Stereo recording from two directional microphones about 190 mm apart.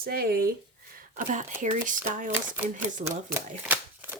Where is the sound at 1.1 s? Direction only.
40° right (ahead or behind).